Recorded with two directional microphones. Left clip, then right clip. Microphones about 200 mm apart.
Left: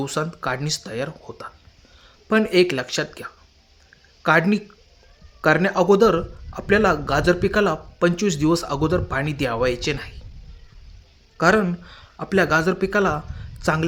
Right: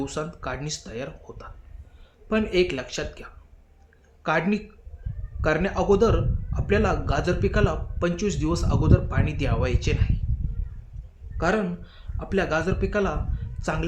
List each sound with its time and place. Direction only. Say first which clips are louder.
0.0 s a man's voice: left 6 dB; 45° left (ahead or behind)
11.3 s a man's voice: left 7 dB; 45° left (ahead or behind)